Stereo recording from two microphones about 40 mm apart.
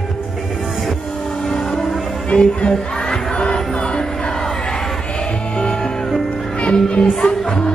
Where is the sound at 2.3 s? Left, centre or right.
Left.